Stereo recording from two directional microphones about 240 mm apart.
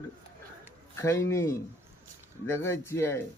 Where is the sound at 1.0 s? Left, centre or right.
Centre.